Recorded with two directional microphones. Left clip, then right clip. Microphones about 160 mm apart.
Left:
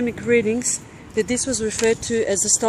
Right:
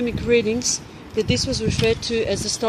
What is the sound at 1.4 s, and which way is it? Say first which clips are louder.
Speech: left 1 dB; 80° left.